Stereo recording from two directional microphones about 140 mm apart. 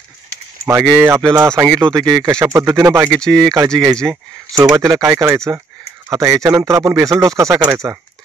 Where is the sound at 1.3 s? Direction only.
20° right (ahead or behind).